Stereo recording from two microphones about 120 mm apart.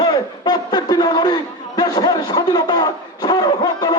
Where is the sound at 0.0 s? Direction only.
35° left (ahead or behind).